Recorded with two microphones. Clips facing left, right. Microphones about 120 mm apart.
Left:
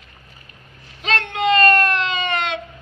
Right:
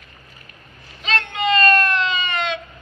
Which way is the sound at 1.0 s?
65° left (ahead or behind).